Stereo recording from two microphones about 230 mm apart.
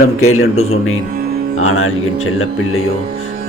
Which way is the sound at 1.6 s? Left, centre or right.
Left.